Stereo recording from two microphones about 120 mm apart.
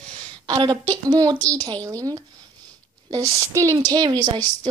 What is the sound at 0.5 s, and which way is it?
A woman's voice, 40° right (ahead or behind).